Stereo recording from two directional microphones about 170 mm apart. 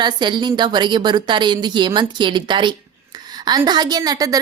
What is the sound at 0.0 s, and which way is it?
A woman's voice, 25° right (ahead or behind).